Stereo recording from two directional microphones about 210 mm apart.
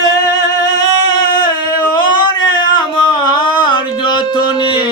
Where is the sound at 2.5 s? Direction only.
20° left (ahead or behind).